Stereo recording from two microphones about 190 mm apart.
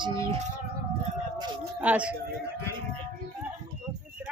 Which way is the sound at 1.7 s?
5° right (ahead or behind).